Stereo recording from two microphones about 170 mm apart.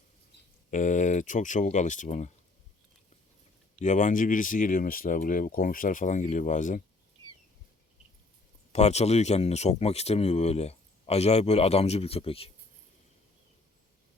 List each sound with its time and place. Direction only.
0.7 s speech: 45° left (ahead or behind)
3.8 s speech: 45° left (ahead or behind)
8.7 s speech: 40° left (ahead or behind)